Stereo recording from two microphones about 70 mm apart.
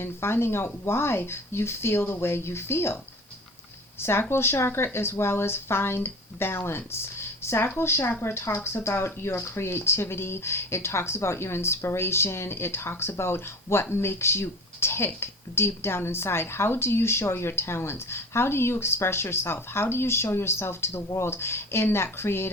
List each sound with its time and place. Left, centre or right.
0.0 s speech: left
4.0 s speech: left